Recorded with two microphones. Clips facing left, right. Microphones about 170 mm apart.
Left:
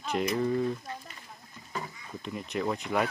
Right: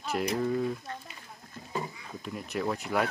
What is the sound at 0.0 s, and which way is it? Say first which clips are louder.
Speech: left 1 dB; centre (ahead or behind).